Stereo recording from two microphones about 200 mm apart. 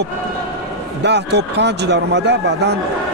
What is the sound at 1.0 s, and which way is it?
Speech, 60° right (ahead or behind).